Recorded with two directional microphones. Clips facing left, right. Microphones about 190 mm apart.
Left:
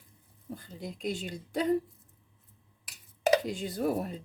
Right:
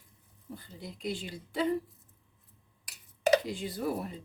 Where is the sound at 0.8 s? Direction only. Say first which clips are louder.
Left 2 dB; 45° left (ahead or behind).